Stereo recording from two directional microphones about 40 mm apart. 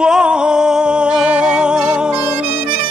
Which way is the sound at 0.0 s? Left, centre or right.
Right.